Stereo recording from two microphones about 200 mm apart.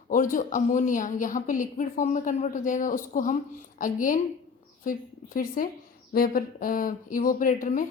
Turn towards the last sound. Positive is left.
turn(degrees=40)  # may be behind; listen again after turning